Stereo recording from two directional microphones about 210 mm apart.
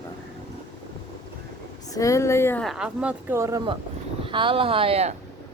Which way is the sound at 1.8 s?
15° left (ahead or behind).